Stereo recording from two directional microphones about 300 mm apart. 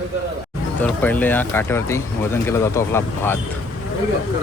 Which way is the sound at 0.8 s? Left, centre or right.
Centre.